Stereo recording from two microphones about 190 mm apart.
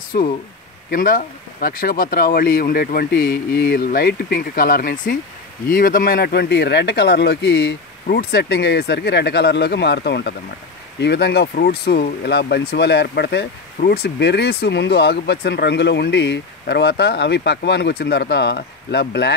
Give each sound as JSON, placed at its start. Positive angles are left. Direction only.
{"t": 0.1, "sound": "speech", "side_deg": 55}